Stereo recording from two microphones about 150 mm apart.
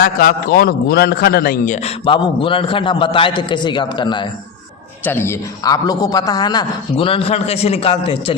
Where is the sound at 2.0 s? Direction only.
35° left (ahead or behind).